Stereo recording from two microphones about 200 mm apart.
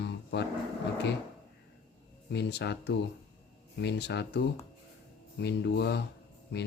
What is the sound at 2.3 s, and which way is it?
Speech, 60° left (ahead or behind).